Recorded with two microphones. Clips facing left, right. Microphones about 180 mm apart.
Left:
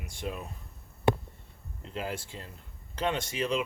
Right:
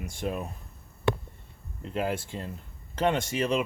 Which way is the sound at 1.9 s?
55° right (ahead or behind).